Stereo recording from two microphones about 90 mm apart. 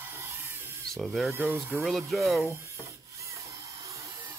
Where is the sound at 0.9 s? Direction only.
Centre (ahead or behind).